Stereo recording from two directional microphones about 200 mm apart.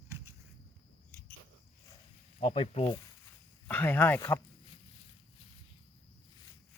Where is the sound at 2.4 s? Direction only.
30° left (ahead or behind).